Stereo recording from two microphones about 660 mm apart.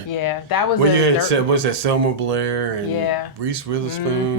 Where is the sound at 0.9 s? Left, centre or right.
Right.